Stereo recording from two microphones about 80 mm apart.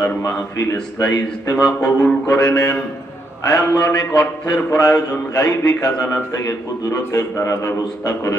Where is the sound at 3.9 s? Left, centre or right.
Left.